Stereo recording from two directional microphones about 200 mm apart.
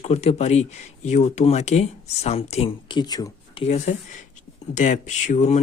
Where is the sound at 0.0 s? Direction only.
30° left (ahead or behind).